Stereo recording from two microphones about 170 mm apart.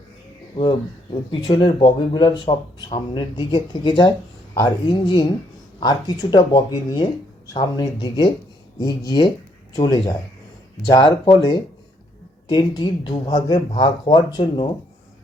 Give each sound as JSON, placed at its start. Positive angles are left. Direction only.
{"t": 0.5, "sound": "speech", "side_deg": 30}